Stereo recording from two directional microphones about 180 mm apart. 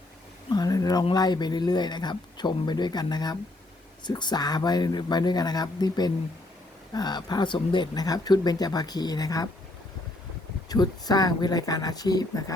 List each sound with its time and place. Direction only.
0.5 s speech: 20° left (ahead or behind)
10.7 s speech: 20° left (ahead or behind)